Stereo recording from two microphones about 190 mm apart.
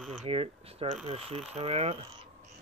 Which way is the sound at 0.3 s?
30° right (ahead or behind).